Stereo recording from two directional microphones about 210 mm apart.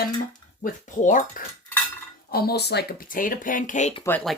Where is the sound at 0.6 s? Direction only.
40° left (ahead or behind).